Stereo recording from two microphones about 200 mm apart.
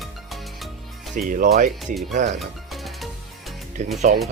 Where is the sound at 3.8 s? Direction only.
35° right (ahead or behind).